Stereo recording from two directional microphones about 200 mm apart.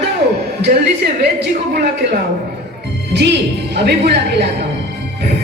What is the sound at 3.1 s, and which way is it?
A woman's voice, 60° right (ahead or behind).